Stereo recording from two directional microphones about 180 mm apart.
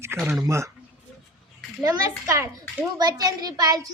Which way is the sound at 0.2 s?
5° right (ahead or behind).